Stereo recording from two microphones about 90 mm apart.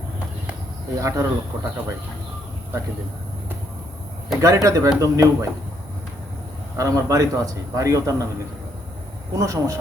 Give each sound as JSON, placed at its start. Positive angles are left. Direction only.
{"t": 0.9, "sound": "a man's voice", "side_deg": -35}
{"t": 4.4, "sound": "a man's voice", "side_deg": -35}
{"t": 6.7, "sound": "a man's voice", "side_deg": -40}
{"t": 9.3, "sound": "a man's voice", "side_deg": -35}